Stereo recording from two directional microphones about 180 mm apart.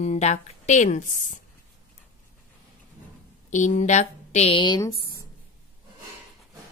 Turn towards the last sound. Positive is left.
turn(degrees=25)  # may be behind; listen again after turning